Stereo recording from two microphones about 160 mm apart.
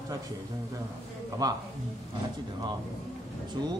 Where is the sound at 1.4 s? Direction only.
20° right (ahead or behind).